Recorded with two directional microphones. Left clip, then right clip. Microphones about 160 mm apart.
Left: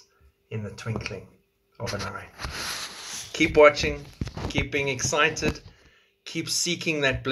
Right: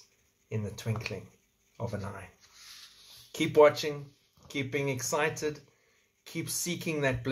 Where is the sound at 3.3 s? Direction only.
20° right (ahead or behind).